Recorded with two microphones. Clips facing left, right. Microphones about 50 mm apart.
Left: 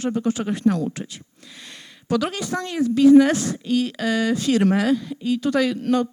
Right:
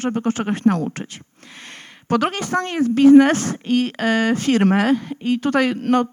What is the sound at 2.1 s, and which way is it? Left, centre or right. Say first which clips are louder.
A woman's voice: right 3 dB; right.